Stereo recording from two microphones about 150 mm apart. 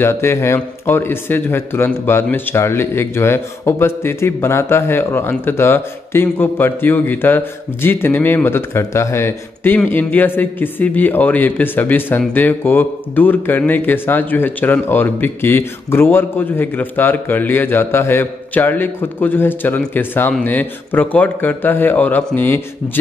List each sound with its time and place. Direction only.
0.0 s a man's voice: 15° left (ahead or behind)